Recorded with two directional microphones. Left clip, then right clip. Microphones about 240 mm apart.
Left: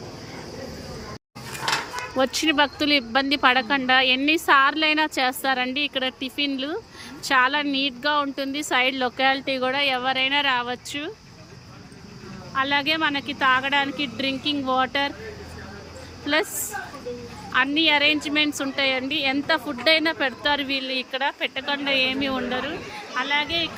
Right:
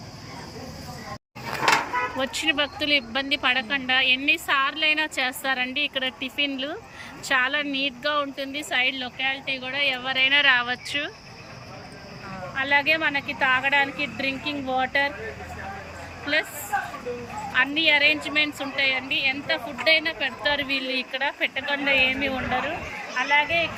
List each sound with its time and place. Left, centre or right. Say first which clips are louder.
1.7 s music: right 4 dB; right
2.1 s a woman's voice: left 8 dB; centre
12.5 s a woman's voice: right 1 dB; centre
16.2 s a woman's voice: left 2 dB; centre
17.5 s a woman's voice: left 1 dB; centre